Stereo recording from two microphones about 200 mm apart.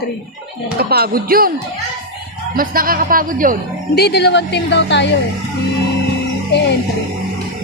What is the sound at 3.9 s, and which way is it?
A woman's voice, 55° left (ahead or behind).